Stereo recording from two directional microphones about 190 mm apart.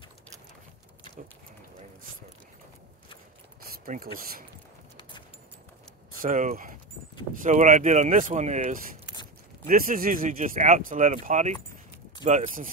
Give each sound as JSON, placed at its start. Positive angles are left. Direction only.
{"t": 3.7, "sound": "speech", "side_deg": -50}
{"t": 6.1, "sound": "speech", "side_deg": -45}